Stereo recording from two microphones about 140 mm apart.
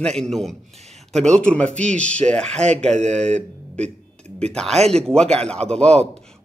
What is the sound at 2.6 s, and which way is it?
Speech, 55° right (ahead or behind).